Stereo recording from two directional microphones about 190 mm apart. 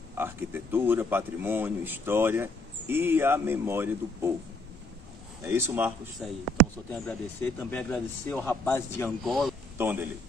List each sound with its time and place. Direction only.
0.2 s speech: 10° right (ahead or behind)
5.4 s a man's voice: 10° right (ahead or behind)
6.2 s a man's voice: centre (ahead or behind)
9.2 s speech: centre (ahead or behind)
9.8 s a man's voice: 10° right (ahead or behind)